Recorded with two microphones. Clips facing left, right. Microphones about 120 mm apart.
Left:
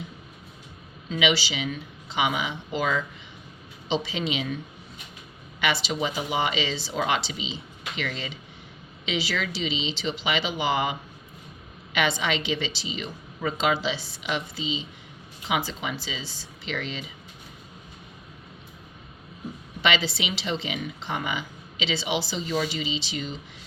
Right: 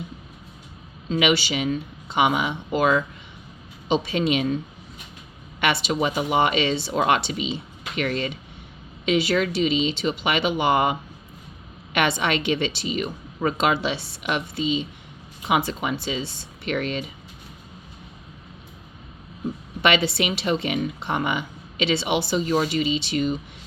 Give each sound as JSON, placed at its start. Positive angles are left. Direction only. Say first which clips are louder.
{"t": 1.1, "sound": "speech", "louder": "right 4 dB", "side_deg": -55}
{"t": 5.5, "sound": "speech", "louder": "right 4 dB", "side_deg": -60}
{"t": 11.9, "sound": "speech", "louder": "right 3 dB", "side_deg": -60}
{"t": 19.8, "sound": "speech", "louder": "right 5 dB", "side_deg": -60}